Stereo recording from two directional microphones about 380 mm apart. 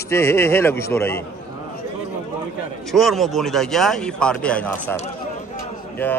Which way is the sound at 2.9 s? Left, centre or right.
Centre.